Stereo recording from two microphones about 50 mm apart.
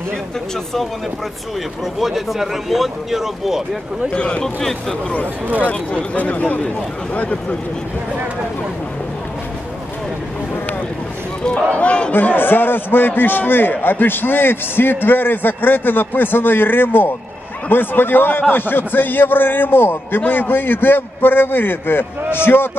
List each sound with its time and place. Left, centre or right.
2.0 s a man's voice: centre
4.2 s a man's voice: centre
4.6 s speech: centre
6.1 s speech: left
11.7 s a man's voice: left
12.1 s a man's voice: left